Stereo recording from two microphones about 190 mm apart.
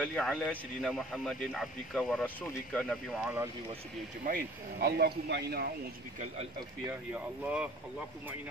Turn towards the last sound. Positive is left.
turn(degrees=-5)  # may be behind; listen again after turning